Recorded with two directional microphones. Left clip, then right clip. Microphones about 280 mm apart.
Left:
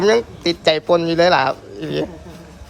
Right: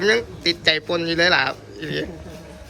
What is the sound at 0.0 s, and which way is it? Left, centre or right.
A man's voice, centre.